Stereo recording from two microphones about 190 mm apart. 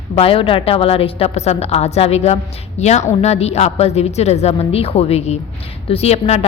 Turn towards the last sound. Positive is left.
turn(degrees=35)  # may be behind; listen again after turning